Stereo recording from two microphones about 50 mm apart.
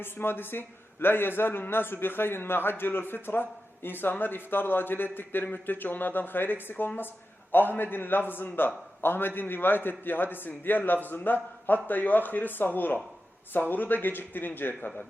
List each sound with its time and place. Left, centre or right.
0.0 s a man's voice: left